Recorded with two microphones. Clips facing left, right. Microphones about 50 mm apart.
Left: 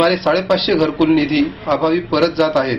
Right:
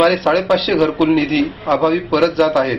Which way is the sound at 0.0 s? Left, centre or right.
Centre.